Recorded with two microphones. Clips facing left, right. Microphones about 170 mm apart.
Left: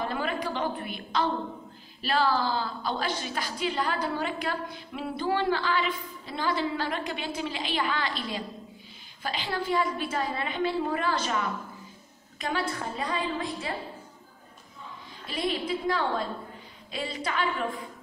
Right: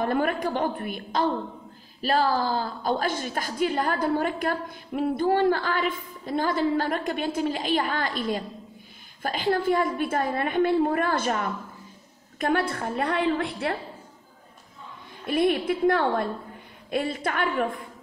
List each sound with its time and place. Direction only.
0.0 s a woman's voice: 55° right (ahead or behind)
15.2 s a woman's voice: 55° right (ahead or behind)